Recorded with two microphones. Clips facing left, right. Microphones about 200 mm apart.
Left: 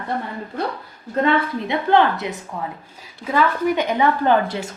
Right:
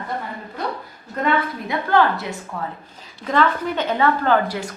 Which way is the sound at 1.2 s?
25° left (ahead or behind).